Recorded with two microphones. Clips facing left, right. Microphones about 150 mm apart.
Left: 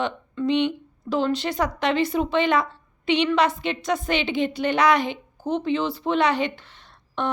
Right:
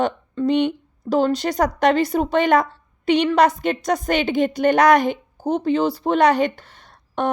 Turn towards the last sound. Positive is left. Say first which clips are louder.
# right 4 dB
turn(degrees=-45)  # may be behind; listen again after turning